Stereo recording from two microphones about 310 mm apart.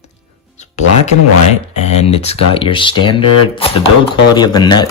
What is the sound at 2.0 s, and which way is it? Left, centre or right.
Speech, centre.